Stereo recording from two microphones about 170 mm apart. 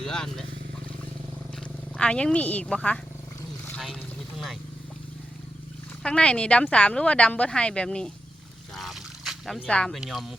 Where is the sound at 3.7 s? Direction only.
Centre (ahead or behind).